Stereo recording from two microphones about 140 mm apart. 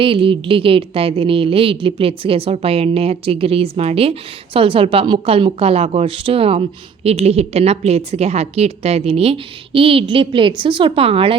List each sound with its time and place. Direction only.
0.0 s speech: 40° right (ahead or behind)